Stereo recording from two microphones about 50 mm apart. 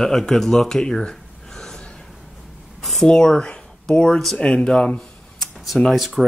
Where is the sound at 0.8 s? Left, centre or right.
Centre.